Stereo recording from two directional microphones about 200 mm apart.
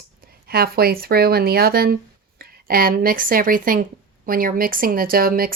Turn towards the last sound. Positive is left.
turn(degrees=-45)  # may be behind; listen again after turning